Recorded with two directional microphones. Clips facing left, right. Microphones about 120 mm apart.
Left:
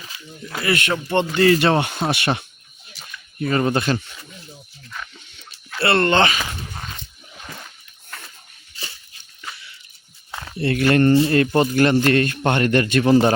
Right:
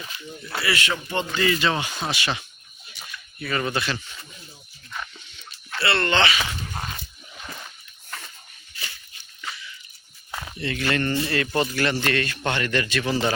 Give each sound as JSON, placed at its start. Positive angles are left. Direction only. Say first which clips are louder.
{"t": 0.6, "sound": "speech", "louder": "left 5 dB", "side_deg": 50}
{"t": 2.9, "sound": "a sound", "louder": "even", "side_deg": 0}
{"t": 3.4, "sound": "a man's voice", "louder": "left 7 dB", "side_deg": 40}
{"t": 5.8, "sound": "a man's voice", "louder": "left 5 dB", "side_deg": 45}
{"t": 10.6, "sound": "a man's voice", "louder": "left 9 dB", "side_deg": 55}
{"t": 11.1, "sound": "speech", "louder": "left 10 dB", "side_deg": 30}
{"t": 11.3, "sound": "a man's voice", "louder": "left 7 dB", "side_deg": 40}